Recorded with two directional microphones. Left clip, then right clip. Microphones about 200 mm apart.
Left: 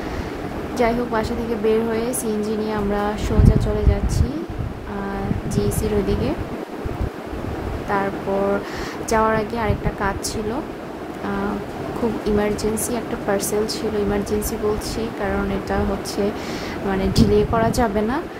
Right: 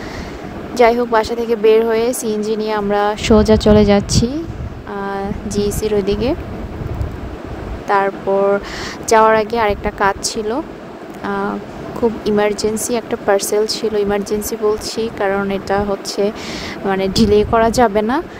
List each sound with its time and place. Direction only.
0.7 s speech: 40° right (ahead or behind)
7.9 s speech: 40° right (ahead or behind)
9.1 s speech: 40° right (ahead or behind)
12.3 s speech: 40° right (ahead or behind)